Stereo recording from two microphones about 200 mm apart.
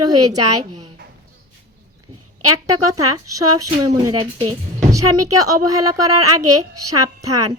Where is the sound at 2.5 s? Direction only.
90° right.